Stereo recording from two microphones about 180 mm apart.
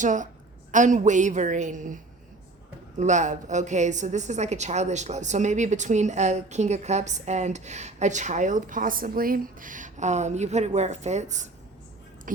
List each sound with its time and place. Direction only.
0.0 s a woman's voice: 45° right (ahead or behind)
3.0 s a woman's voice: 40° right (ahead or behind)